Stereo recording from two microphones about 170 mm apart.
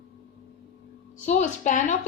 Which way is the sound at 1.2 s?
50° left (ahead or behind).